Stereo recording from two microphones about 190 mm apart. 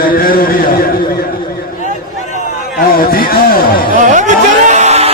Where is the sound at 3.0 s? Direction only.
50° left (ahead or behind).